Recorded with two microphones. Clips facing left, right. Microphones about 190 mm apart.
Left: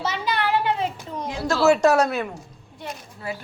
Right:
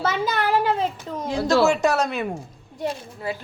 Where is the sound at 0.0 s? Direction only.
50° right (ahead or behind).